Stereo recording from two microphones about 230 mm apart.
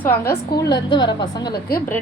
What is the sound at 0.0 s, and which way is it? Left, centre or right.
A woman's voice, centre.